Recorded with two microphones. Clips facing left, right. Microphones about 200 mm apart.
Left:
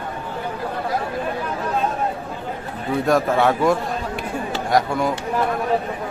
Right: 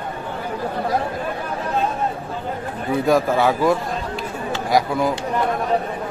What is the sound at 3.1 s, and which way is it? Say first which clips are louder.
A man's voice: even; centre (ahead or behind).